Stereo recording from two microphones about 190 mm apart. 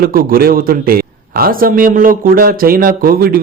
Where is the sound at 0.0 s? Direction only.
50° right (ahead or behind).